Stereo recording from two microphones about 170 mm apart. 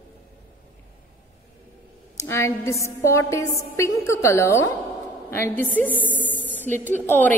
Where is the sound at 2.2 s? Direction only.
15° left (ahead or behind).